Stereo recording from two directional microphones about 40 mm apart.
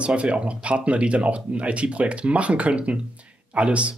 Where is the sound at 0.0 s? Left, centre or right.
Right.